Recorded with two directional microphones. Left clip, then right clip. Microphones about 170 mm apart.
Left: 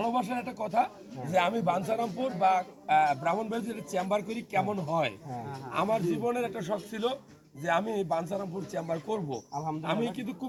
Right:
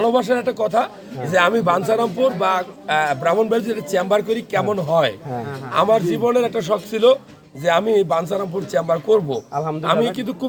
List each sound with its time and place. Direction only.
0.0 s speech: 20° right (ahead or behind)